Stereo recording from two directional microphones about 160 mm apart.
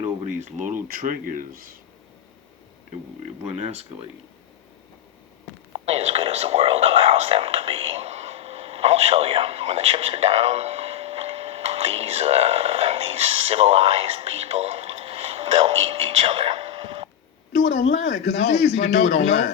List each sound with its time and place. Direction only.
0.0 s speech: 45° right (ahead or behind)
3.2 s speech: 40° right (ahead or behind)
5.7 s a sound: 40° right (ahead or behind)
17.7 s a man's voice: 50° left (ahead or behind)